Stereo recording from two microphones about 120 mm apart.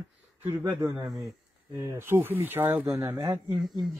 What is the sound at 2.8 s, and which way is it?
Speech, 35° right (ahead or behind).